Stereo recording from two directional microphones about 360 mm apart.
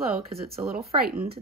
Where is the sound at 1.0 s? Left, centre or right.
Right.